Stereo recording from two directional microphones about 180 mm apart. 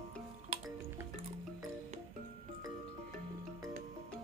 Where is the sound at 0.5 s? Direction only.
35° right (ahead or behind).